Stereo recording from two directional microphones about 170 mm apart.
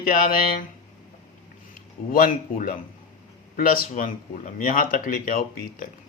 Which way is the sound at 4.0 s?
55° left (ahead or behind).